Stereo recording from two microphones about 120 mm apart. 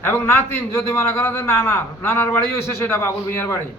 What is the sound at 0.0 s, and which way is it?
A man's voice, 20° left (ahead or behind).